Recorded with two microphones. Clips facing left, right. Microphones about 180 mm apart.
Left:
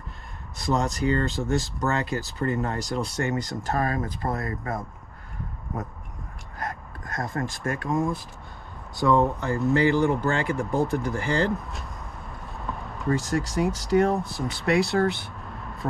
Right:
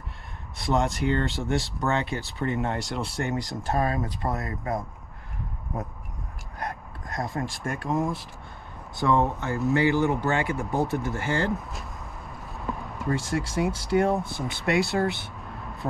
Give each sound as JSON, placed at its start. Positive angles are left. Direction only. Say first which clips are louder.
{"t": 0.6, "sound": "speech", "louder": "even", "side_deg": 0}
{"t": 3.8, "sound": "speech", "louder": "even", "side_deg": -20}
{"t": 6.6, "sound": "a sound", "louder": "even", "side_deg": 0}
{"t": 8.9, "sound": "speech", "louder": "left 2 dB", "side_deg": 0}
{"t": 12.9, "sound": "speech", "louder": "left 3 dB", "side_deg": 0}